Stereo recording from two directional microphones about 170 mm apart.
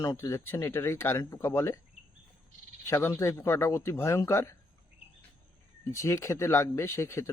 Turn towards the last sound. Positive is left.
turn(degrees=15)  # may be behind; listen again after turning